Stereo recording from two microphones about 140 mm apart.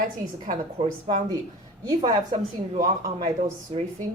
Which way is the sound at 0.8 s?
50° right (ahead or behind).